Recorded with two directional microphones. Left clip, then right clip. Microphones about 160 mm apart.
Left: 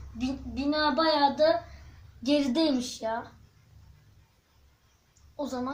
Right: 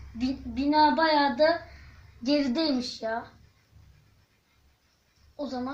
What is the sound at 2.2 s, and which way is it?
Speech, 15° right (ahead or behind).